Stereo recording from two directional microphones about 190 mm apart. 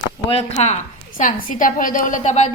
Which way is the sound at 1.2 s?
45° left (ahead or behind).